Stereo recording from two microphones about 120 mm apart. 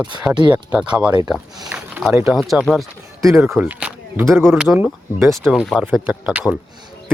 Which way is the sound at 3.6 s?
10° right (ahead or behind).